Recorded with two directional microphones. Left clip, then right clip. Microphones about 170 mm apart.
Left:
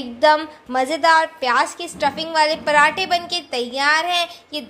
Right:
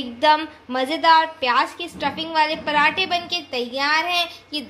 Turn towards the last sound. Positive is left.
turn(degrees=10)  # may be behind; listen again after turning